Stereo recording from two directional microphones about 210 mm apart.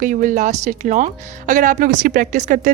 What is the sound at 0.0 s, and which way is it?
Speech, 40° right (ahead or behind).